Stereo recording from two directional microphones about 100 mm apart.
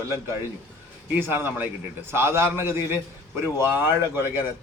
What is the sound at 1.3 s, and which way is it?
A man's voice, 20° right (ahead or behind).